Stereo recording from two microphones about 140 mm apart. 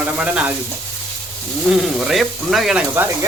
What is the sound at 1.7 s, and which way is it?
Speech, 5° right (ahead or behind).